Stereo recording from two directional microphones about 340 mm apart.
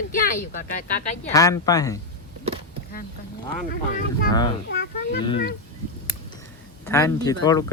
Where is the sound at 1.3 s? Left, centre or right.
Centre.